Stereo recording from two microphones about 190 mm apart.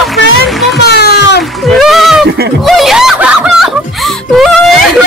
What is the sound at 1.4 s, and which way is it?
Music, centre (ahead or behind).